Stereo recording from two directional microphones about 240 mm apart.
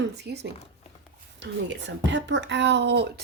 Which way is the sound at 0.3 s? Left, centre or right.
Right.